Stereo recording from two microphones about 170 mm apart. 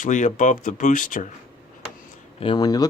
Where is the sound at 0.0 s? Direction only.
45° left (ahead or behind).